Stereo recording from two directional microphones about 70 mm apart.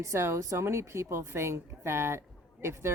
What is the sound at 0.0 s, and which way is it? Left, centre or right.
Speech, right.